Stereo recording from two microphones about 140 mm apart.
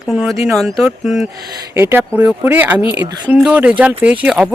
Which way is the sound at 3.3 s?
10° right (ahead or behind).